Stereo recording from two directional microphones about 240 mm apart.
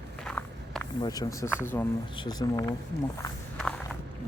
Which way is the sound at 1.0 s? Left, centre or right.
Centre.